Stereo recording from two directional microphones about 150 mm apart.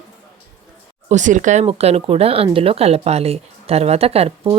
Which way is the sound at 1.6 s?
40° right (ahead or behind).